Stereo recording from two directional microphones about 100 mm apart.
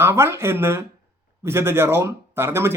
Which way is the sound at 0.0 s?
25° right (ahead or behind).